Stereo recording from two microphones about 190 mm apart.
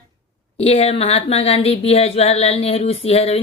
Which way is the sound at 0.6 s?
30° left (ahead or behind).